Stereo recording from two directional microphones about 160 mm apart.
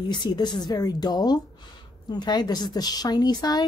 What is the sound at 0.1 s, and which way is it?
A woman's voice, 25° left (ahead or behind).